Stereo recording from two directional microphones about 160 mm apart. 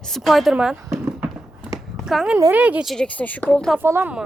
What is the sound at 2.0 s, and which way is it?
Speech, 5° right (ahead or behind).